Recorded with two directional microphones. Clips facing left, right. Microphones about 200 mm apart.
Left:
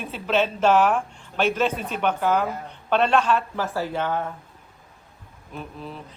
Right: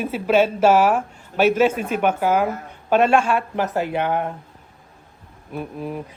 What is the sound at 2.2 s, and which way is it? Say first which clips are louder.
A woman's voice: right 3 dB; 10° right (ahead or behind).